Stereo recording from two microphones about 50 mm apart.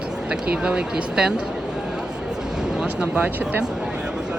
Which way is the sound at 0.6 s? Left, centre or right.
Centre.